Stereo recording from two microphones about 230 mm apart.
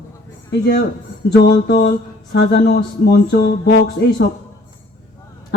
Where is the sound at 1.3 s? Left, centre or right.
Left.